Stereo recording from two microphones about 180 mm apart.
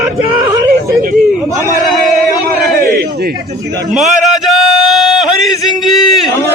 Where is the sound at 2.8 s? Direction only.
60° right (ahead or behind).